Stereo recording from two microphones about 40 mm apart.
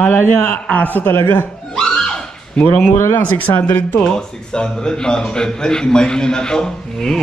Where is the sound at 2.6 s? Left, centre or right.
Left.